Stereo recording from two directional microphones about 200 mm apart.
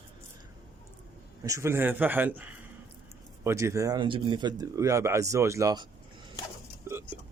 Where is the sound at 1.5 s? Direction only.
15° right (ahead or behind).